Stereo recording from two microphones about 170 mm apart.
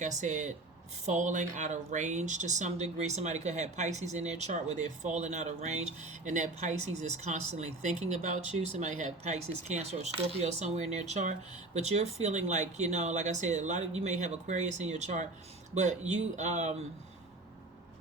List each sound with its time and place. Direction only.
0.0 s speech: 45° right (ahead or behind)